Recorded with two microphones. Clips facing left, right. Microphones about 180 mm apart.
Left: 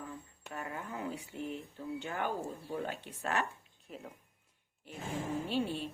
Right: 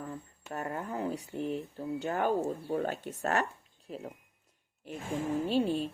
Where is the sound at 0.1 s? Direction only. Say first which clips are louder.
Right 5 dB; 40° right (ahead or behind).